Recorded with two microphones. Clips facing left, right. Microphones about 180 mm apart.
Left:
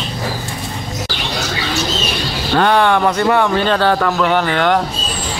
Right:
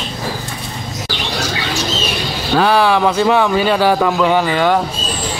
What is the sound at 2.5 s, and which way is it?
Speech, 5° right (ahead or behind).